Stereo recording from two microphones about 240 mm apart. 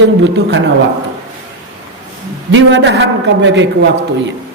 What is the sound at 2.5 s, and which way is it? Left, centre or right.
A man's voice, right.